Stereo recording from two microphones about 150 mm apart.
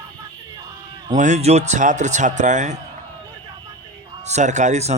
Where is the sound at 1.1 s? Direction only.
55° right (ahead or behind).